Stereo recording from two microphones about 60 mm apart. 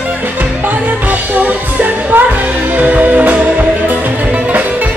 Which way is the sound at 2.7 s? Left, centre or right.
Right.